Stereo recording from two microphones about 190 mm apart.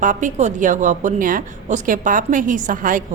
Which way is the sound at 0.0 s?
40° right (ahead or behind).